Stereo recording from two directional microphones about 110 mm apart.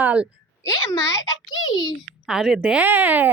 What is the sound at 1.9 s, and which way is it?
Speech, 5° right (ahead or behind).